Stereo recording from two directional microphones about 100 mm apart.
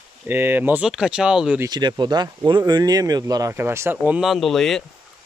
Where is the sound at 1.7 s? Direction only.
45° right (ahead or behind); by 4.1 s 25° right (ahead or behind).